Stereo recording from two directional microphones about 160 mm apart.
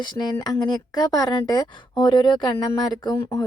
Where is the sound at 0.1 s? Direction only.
25° left (ahead or behind).